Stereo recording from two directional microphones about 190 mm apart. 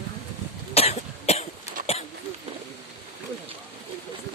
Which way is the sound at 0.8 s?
35° left (ahead or behind).